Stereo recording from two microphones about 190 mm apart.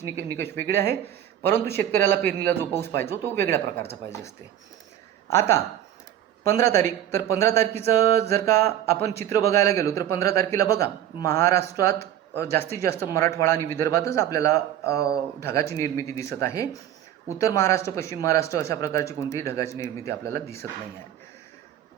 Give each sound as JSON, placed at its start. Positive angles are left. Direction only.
{"t": 0.3, "sound": "a man's voice", "side_deg": 10}
{"t": 5.3, "sound": "speech", "side_deg": 15}